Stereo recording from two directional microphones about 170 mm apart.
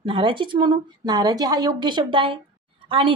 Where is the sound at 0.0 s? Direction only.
30° right (ahead or behind).